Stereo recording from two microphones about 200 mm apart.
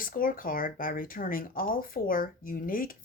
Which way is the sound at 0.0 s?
45° left (ahead or behind).